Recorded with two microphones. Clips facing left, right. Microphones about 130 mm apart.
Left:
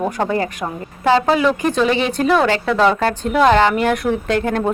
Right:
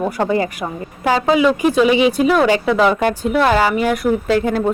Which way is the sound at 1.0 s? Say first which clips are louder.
Even; 10° right (ahead or behind).